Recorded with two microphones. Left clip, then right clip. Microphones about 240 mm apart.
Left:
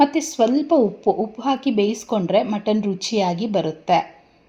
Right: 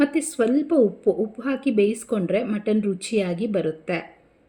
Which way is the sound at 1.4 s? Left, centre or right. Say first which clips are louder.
Left 2 dB; centre.